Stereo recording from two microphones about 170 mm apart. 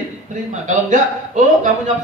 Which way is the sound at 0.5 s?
45° right (ahead or behind).